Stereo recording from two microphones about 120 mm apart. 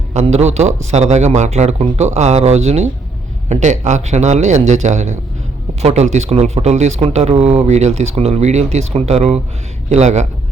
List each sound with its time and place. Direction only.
0.1 s a man's voice: 65° right (ahead or behind)
3.5 s a man's voice: 80° right; by 9.4 s 60° right (ahead or behind)
9.9 s a man's voice: 70° right (ahead or behind)